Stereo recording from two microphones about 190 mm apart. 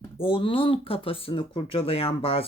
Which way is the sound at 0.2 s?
30° left (ahead or behind).